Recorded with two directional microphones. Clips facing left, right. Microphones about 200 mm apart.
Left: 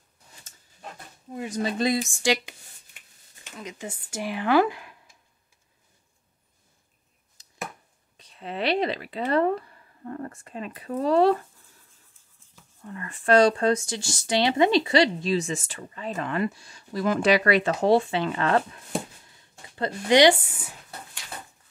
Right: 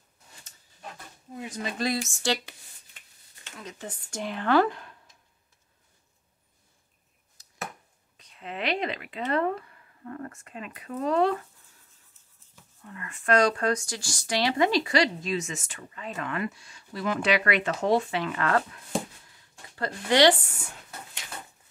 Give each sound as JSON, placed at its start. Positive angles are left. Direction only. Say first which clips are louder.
{"t": 1.6, "sound": "speech", "louder": "left 5 dB", "side_deg": 20}
{"t": 8.2, "sound": "speech", "louder": "left 4 dB", "side_deg": 35}
{"t": 12.8, "sound": "speech", "louder": "left 4 dB", "side_deg": 35}
{"t": 20.4, "sound": "speech", "louder": "even", "side_deg": 5}